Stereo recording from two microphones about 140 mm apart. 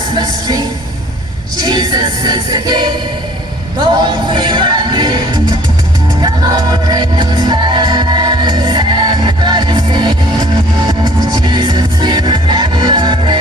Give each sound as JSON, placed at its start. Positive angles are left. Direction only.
{"t": 0.1, "sound": "speech", "side_deg": -30}
{"t": 1.5, "sound": "music", "side_deg": -30}
{"t": 3.8, "sound": "speech", "side_deg": -30}
{"t": 6.2, "sound": "music", "side_deg": -30}